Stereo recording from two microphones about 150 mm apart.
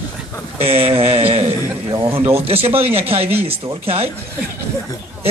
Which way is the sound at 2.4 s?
40° right (ahead or behind).